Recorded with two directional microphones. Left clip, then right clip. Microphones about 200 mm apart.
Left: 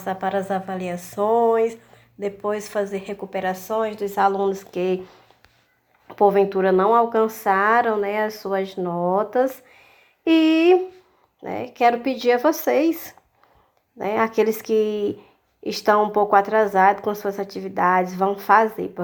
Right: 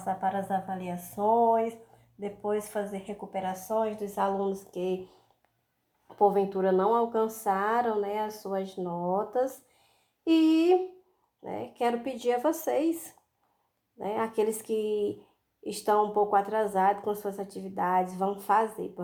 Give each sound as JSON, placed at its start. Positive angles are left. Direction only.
{"t": 0.0, "sound": "a woman's voice", "side_deg": 30}